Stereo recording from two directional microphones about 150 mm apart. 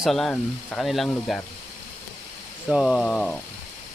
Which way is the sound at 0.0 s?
Centre (ahead or behind).